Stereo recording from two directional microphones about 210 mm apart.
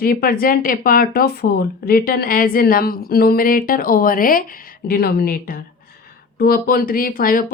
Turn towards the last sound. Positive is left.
turn(degrees=45)  # may be behind; listen again after turning